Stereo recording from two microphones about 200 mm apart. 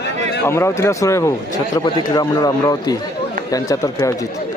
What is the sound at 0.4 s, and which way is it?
Speech, 15° left (ahead or behind).